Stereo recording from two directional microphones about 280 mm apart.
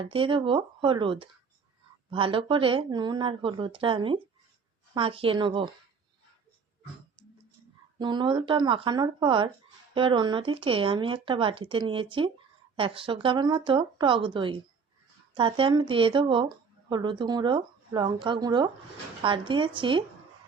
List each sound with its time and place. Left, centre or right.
0.0 s speech: centre
7.9 s speech: centre